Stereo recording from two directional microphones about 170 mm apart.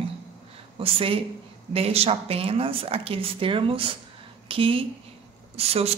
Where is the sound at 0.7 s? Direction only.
30° right (ahead or behind).